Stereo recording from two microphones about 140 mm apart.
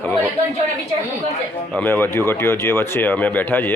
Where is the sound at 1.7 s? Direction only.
15° left (ahead or behind).